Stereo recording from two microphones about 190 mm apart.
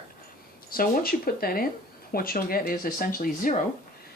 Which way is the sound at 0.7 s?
50° left (ahead or behind).